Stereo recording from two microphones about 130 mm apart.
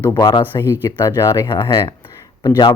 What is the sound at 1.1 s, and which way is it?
Speech, 25° left (ahead or behind).